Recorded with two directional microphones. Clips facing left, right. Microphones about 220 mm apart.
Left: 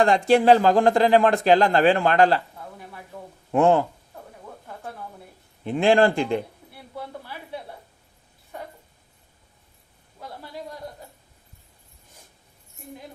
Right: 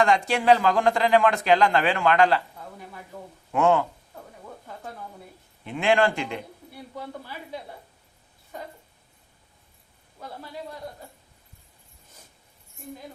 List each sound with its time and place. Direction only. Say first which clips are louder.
0.0 s speech: left 5 dB; 35° left (ahead or behind)
3.5 s speech: left 3 dB; 35° left (ahead or behind)
5.6 s speech: left 4 dB; 35° left (ahead or behind)